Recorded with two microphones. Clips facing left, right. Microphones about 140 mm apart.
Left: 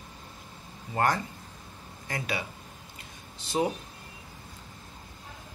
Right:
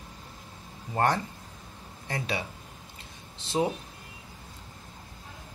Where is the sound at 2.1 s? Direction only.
30° right (ahead or behind).